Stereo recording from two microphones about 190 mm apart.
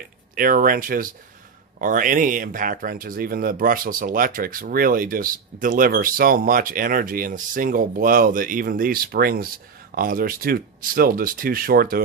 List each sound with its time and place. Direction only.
0.3 s speech: 45° right (ahead or behind)